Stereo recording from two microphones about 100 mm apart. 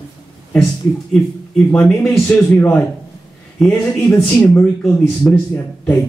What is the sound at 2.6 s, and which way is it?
A man's voice, 20° left (ahead or behind).